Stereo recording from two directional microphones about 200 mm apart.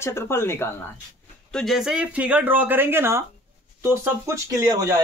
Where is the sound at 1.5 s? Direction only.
Centre (ahead or behind); by 5.0 s 15° right (ahead or behind).